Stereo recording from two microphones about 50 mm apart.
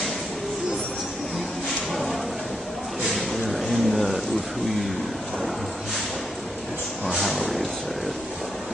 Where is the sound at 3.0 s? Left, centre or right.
Centre.